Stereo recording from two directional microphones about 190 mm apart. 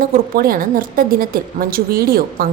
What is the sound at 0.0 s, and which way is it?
A woman's voice, 50° right (ahead or behind).